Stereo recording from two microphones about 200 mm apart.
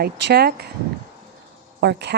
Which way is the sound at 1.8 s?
55° right (ahead or behind).